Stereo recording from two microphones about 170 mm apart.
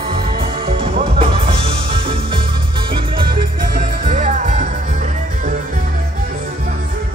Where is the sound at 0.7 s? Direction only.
30° right (ahead or behind).